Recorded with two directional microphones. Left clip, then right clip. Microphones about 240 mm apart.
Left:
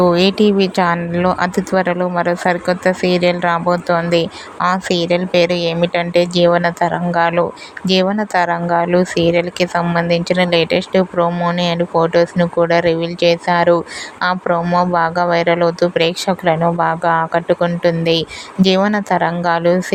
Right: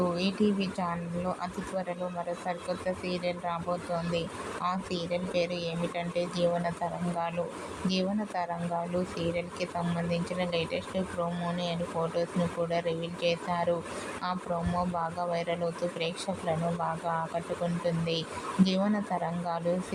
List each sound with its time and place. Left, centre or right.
0.0 s speech: left